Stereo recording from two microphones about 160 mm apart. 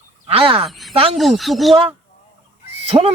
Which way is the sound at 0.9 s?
35° right (ahead or behind).